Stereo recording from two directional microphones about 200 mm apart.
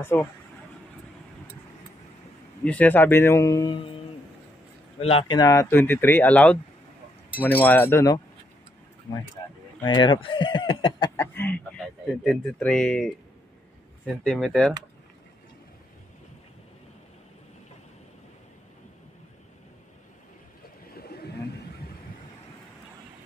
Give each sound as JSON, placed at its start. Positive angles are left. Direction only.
{"t": 0.0, "sound": "speech", "side_deg": 10}
{"t": 2.6, "sound": "speech", "side_deg": 5}
{"t": 5.0, "sound": "speech", "side_deg": 25}
{"t": 9.8, "sound": "speech", "side_deg": 20}
{"t": 11.1, "sound": "a sound", "side_deg": 10}
{"t": 12.2, "sound": "speech", "side_deg": 0}
{"t": 20.9, "sound": "bird", "side_deg": 50}